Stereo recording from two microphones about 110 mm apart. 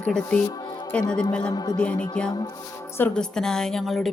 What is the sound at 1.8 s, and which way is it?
Speech, 10° left (ahead or behind).